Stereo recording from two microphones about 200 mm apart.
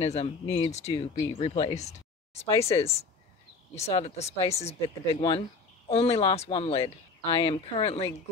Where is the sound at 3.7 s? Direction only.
30° left (ahead or behind).